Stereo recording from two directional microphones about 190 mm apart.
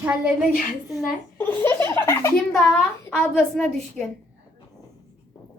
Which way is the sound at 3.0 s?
10° left (ahead or behind).